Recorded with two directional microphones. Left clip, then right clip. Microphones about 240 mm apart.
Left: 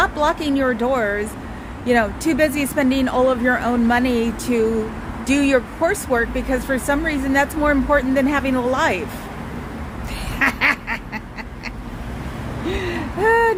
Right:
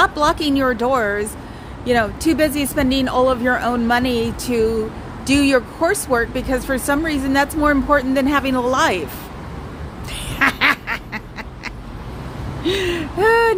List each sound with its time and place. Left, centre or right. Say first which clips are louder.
0.0 s speech: right 2 dB; centre
10.3 s quack: right 2 dB; centre
12.6 s speech: right 5 dB; right